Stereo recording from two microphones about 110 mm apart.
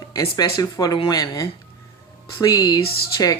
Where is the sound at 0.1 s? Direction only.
35° left (ahead or behind).